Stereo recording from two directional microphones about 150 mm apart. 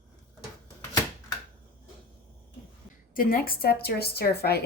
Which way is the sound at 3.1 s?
70° left (ahead or behind).